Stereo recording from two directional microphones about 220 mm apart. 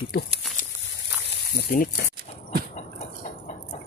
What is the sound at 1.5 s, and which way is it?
Speech, 45° left (ahead or behind).